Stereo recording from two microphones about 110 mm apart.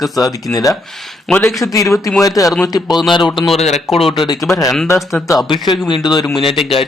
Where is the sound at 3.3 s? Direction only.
Centre (ahead or behind).